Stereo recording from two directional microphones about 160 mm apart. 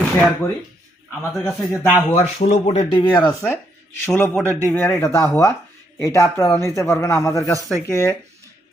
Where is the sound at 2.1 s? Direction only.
45° left (ahead or behind); by 3.3 s 30° left (ahead or behind).